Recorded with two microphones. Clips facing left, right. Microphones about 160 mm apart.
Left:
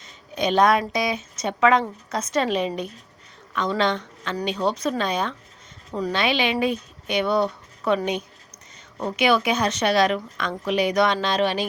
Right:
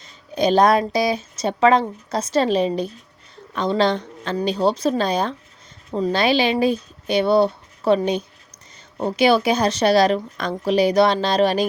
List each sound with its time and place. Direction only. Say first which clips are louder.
0.0 s speech: right 5 dB; 35° right (ahead or behind)